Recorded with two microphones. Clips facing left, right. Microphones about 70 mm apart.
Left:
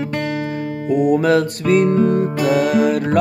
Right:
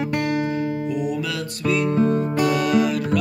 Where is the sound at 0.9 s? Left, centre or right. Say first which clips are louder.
Left 11 dB; left.